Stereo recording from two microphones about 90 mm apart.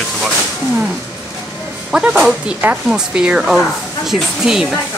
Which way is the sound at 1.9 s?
15° right (ahead or behind).